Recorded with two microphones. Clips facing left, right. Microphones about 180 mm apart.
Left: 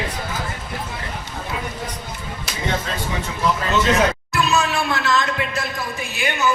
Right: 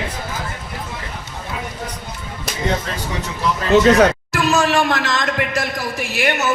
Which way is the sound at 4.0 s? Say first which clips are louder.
Right 5 dB; 90° right.